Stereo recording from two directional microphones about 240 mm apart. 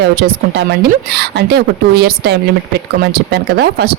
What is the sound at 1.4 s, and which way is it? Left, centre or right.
Speech, right.